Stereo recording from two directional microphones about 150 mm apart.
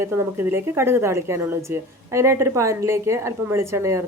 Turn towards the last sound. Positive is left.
turn(degrees=-20)  # may be behind; listen again after turning